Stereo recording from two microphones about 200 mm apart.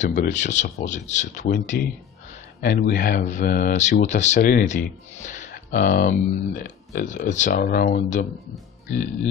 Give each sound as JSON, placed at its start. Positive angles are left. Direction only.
{"t": 0.0, "sound": "speech", "side_deg": 35}
{"t": 7.5, "sound": "speech", "side_deg": 50}